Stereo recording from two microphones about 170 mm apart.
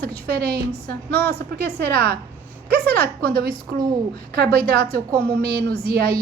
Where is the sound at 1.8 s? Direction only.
65° right (ahead or behind).